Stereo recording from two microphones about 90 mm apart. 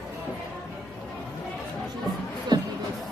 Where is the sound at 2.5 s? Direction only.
55° right (ahead or behind).